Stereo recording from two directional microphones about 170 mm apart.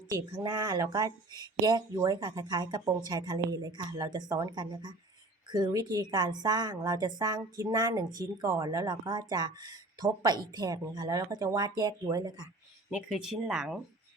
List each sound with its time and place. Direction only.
0.3 s a woman's voice: 25° right (ahead or behind)
12.9 s speech: 5° right (ahead or behind)